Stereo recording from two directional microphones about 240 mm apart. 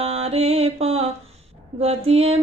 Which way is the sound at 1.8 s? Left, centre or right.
Right.